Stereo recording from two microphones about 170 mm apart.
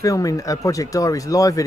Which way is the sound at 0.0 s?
20° left (ahead or behind).